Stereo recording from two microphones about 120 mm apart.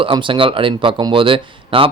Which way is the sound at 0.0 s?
45° right (ahead or behind).